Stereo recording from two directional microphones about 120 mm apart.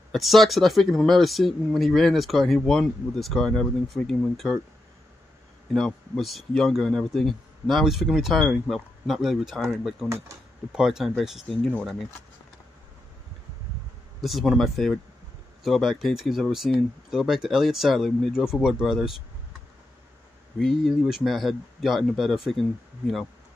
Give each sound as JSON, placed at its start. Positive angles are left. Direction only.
{"t": 0.1, "sound": "speech", "side_deg": 0}
{"t": 5.7, "sound": "speech", "side_deg": 5}
{"t": 14.2, "sound": "speech", "side_deg": 0}
{"t": 20.5, "sound": "speech", "side_deg": 0}